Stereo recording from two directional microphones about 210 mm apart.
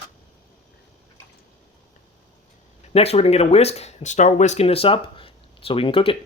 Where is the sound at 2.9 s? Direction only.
30° left (ahead or behind).